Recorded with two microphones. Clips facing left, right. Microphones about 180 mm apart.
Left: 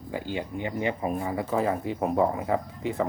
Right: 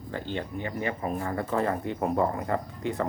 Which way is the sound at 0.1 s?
10° left (ahead or behind).